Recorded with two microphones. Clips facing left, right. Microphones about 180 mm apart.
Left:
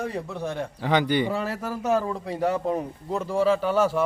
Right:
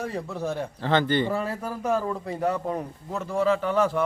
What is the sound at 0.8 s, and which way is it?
Speech, 10° left (ahead or behind).